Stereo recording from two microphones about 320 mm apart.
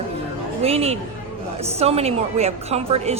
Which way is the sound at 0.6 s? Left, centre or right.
Centre.